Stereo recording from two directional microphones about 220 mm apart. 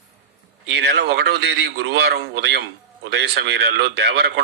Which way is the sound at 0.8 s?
50° right (ahead or behind).